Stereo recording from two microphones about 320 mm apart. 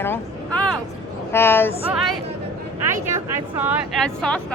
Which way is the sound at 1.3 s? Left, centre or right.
Centre.